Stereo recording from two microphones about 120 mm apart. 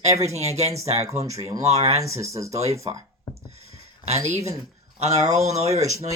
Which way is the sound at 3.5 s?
60° right (ahead or behind).